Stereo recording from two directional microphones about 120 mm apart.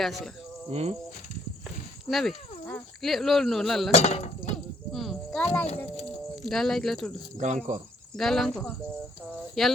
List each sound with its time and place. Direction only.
0.0 s speech: centre (ahead or behind)
0.7 s cricket: 60° right (ahead or behind)
2.0 s speech: centre (ahead or behind)
3.9 s a sound: 60° left (ahead or behind)
4.9 s cricket: centre (ahead or behind)
5.4 s a child's voice: 10° left (ahead or behind)
7.3 s speech: 85° right
8.1 s speech: 5° left (ahead or behind)